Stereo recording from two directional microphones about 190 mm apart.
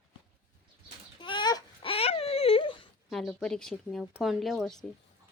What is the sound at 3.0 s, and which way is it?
Speech, centre (ahead or behind).